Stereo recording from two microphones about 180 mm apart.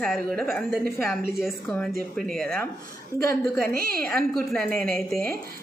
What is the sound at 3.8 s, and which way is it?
Speech, 55° right (ahead or behind).